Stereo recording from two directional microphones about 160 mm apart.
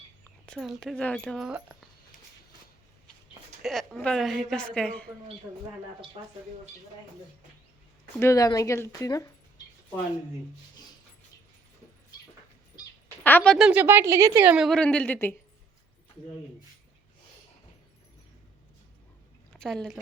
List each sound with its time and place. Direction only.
0.4 s a woman's voice: centre (ahead or behind)
3.6 s a woman's voice: centre (ahead or behind)
8.2 s a woman's voice: 20° left (ahead or behind)
13.2 s speech: 10° left (ahead or behind)
13.7 s a woman's voice: 10° right (ahead or behind)
14.5 s a woman's voice: centre (ahead or behind)
19.5 s a woman's voice: 5° left (ahead or behind)